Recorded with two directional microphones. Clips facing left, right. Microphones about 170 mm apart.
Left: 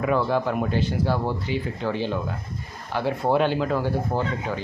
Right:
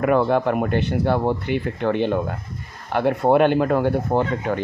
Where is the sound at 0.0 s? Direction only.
55° right (ahead or behind).